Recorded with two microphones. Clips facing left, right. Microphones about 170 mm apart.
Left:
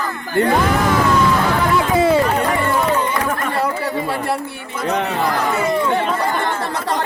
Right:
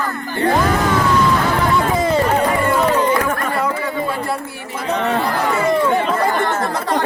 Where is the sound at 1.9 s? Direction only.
10° left (ahead or behind).